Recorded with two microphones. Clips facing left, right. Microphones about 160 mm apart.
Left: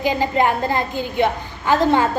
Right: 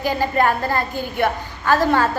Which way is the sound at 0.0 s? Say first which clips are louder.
Left 1 dB; 20° left (ahead or behind).